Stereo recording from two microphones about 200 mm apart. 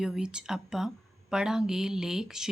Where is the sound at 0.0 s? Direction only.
5° right (ahead or behind).